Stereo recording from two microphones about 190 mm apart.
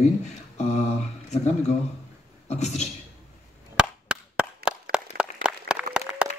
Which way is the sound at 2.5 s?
35° left (ahead or behind).